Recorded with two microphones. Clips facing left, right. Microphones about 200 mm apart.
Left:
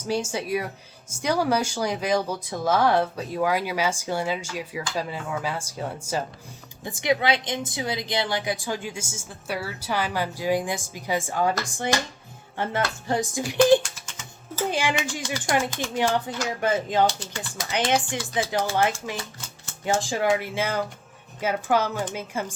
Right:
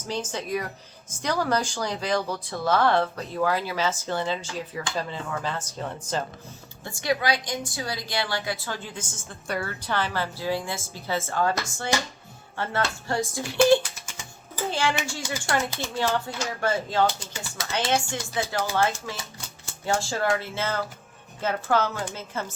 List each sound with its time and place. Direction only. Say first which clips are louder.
0.1 s speech: left 3 dB; 10° left (ahead or behind)
6.8 s speech: left 2 dB; 20° left (ahead or behind)
14.7 s speech: even; 15° left (ahead or behind)